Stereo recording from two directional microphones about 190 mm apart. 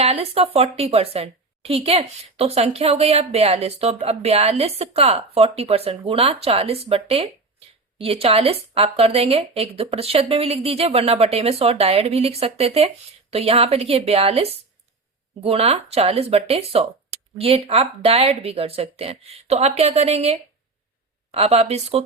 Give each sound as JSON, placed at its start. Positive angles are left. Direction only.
{"t": 0.0, "sound": "speech", "side_deg": -35}